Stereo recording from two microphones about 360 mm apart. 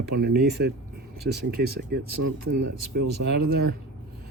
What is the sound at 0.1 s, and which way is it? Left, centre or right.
Speech, right.